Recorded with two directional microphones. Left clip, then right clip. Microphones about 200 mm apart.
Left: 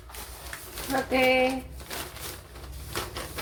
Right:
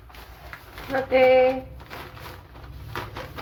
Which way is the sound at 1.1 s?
15° left (ahead or behind).